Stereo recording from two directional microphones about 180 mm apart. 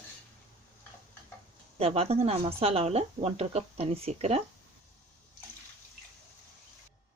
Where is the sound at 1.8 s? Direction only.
35° right (ahead or behind).